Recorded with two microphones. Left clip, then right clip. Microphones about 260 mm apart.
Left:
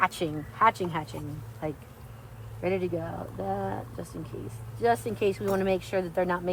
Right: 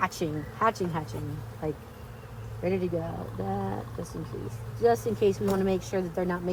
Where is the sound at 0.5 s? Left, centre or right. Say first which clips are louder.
Left 3 dB; left.